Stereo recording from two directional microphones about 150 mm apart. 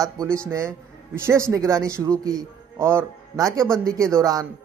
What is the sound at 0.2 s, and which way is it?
Speech, 20° right (ahead or behind).